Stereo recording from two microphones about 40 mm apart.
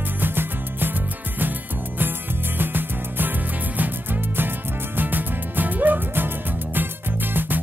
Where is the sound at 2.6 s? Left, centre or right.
Right.